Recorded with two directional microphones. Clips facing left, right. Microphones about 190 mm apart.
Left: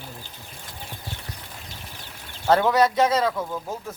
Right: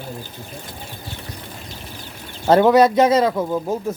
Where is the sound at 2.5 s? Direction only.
20° right (ahead or behind).